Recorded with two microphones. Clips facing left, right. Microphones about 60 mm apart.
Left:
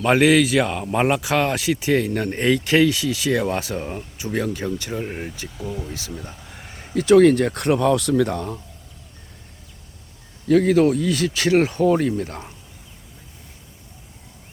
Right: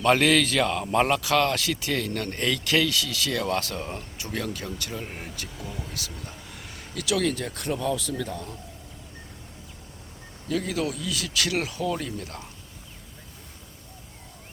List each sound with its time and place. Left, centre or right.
0.0 s speech: centre
5.5 s speech: centre
5.9 s speech: left
10.5 s speech: left